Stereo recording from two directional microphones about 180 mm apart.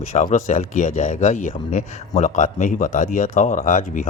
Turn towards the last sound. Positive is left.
turn(degrees=45)  # may be behind; listen again after turning